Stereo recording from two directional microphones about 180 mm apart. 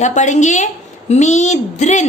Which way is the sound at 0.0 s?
40° left (ahead or behind).